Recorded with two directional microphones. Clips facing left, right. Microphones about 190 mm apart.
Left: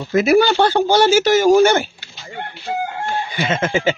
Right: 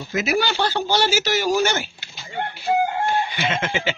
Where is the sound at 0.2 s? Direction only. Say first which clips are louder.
Left 8 dB; 55° left (ahead or behind).